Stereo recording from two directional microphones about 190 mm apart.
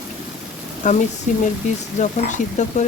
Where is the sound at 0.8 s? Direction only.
40° left (ahead or behind).